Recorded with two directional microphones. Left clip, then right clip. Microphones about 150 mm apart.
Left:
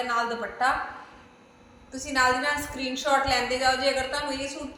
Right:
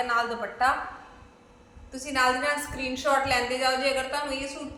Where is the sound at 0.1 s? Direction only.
5° left (ahead or behind).